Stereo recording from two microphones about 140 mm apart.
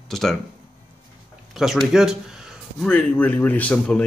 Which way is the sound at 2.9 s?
10° left (ahead or behind).